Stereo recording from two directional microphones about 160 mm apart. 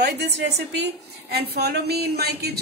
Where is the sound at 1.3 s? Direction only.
80° right.